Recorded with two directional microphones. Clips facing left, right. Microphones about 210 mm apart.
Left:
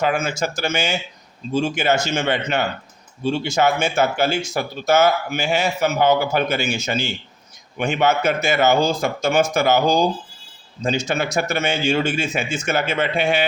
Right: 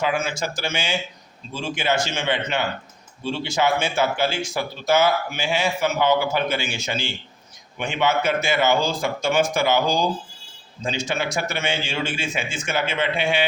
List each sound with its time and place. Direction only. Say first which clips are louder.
0.0 s speech: left 3 dB; 45° left (ahead or behind)